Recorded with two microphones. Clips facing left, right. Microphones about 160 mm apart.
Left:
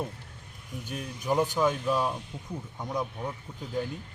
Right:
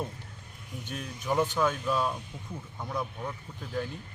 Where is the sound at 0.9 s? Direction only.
10° left (ahead or behind).